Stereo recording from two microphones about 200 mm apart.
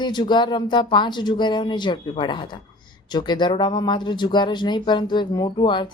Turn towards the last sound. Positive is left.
turn(degrees=25)  # may be behind; listen again after turning